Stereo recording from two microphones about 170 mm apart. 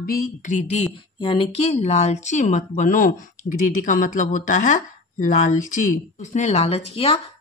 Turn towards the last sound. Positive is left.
turn(degrees=35)  # may be behind; listen again after turning